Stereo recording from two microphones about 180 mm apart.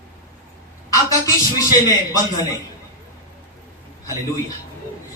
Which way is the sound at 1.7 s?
20° left (ahead or behind).